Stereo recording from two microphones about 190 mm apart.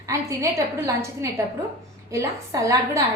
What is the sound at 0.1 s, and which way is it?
Speech, 15° right (ahead or behind).